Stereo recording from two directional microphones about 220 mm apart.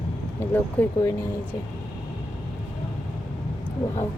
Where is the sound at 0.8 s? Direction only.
10° left (ahead or behind).